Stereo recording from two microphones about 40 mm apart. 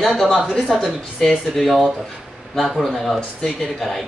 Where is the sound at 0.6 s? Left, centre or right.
Centre.